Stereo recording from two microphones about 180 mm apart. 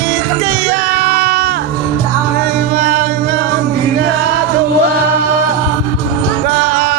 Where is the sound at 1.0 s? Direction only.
60° right (ahead or behind).